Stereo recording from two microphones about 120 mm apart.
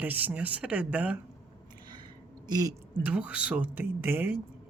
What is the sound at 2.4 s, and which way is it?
Speech, 35° right (ahead or behind).